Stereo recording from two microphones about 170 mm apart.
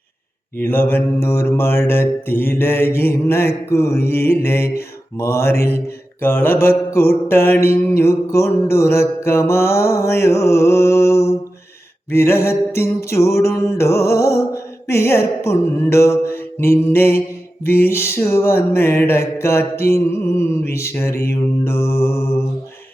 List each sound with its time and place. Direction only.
0.6 s mantra: 10° left (ahead or behind)